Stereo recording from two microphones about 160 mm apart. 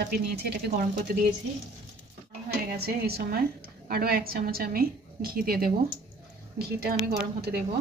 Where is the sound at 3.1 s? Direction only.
75° right (ahead or behind).